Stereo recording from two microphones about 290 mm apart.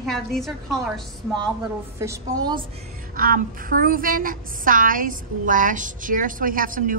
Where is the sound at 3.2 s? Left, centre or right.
Right.